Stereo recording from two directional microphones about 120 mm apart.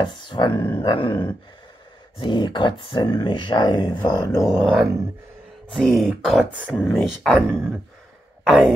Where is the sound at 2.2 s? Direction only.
40° left (ahead or behind).